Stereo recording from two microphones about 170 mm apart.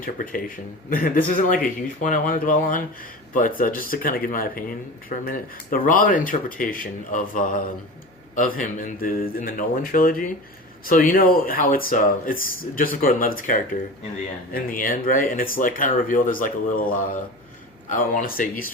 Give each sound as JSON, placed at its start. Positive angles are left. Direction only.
{"t": 0.0, "sound": "speech", "side_deg": 55}